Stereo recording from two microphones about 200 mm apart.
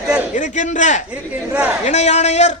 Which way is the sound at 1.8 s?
35° left (ahead or behind).